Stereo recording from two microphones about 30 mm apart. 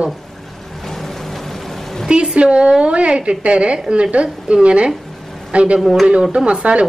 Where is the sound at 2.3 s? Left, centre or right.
Right.